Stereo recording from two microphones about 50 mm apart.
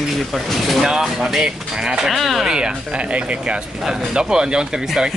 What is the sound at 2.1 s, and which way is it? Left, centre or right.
Speech, centre.